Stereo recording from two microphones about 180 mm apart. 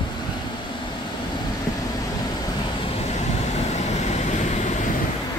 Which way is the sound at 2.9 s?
40° left (ahead or behind).